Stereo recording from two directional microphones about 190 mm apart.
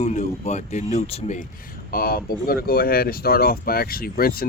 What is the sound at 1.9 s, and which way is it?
Speech, 50° left (ahead or behind).